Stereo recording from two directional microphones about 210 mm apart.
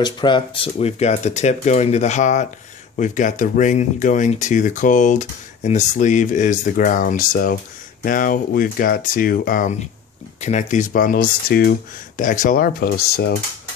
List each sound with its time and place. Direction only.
0.0 s speech: 20° left (ahead or behind); by 13.3 s 50° left (ahead or behind)